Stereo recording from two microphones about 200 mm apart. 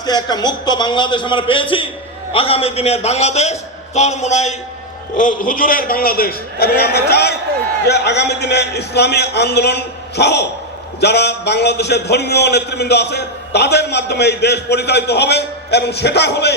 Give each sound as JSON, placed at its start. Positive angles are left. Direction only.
{"t": 0.0, "sound": "a man's voice", "side_deg": 20}